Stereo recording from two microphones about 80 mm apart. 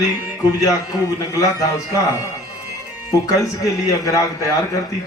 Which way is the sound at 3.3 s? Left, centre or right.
Left.